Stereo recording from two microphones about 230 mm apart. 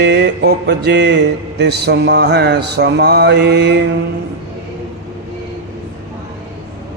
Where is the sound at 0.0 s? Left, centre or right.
Right.